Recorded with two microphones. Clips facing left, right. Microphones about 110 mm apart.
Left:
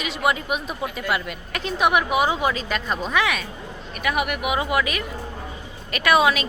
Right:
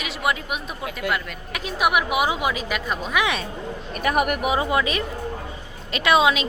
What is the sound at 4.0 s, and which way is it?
Speech, 40° right (ahead or behind).